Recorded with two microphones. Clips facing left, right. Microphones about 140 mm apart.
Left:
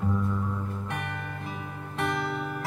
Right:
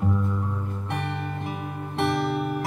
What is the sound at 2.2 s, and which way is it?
Music, 65° right (ahead or behind).